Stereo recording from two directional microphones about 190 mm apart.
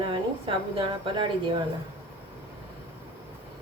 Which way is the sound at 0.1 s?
25° right (ahead or behind).